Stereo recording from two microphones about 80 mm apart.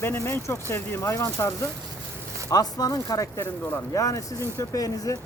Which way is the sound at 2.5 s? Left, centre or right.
Left.